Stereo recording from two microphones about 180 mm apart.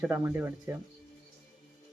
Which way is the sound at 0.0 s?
10° right (ahead or behind).